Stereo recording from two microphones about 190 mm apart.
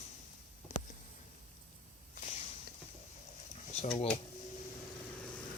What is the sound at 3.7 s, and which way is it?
Drawer open or close, 30° left (ahead or behind).